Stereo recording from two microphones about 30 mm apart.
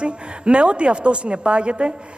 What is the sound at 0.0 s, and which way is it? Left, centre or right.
A woman's voice, right.